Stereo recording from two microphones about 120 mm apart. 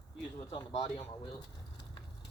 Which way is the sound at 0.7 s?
65° left (ahead or behind).